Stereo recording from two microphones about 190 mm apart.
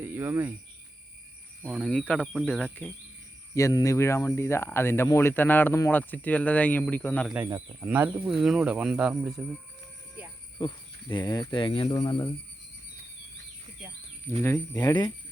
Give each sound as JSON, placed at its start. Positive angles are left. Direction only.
{"t": 0.0, "sound": "speech", "side_deg": -10}
{"t": 1.6, "sound": "speech", "side_deg": 0}
{"t": 3.5, "sound": "speech", "side_deg": 20}
{"t": 7.3, "sound": "speech", "side_deg": -15}
{"t": 10.6, "sound": "speech", "side_deg": 25}
{"t": 14.3, "sound": "speech", "side_deg": 15}